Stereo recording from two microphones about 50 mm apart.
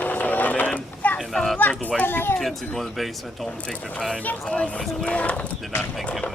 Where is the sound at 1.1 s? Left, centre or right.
Centre.